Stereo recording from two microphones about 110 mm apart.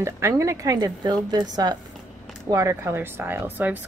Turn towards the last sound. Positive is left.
turn(degrees=-15)  # may be behind; listen again after turning